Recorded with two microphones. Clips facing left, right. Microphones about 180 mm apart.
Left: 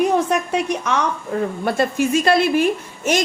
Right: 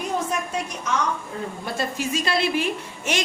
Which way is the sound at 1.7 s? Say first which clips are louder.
Left 8 dB; 55° left (ahead or behind).